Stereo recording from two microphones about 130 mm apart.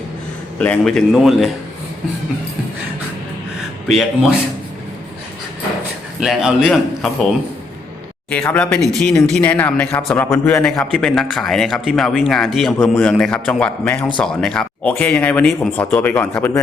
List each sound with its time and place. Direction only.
0.6 s speech: 10° left (ahead or behind)
3.8 s speech: centre (ahead or behind)
6.1 s speech: 5° right (ahead or behind)
8.3 s speech: 10° left (ahead or behind)
10.7 s speech: 5° left (ahead or behind)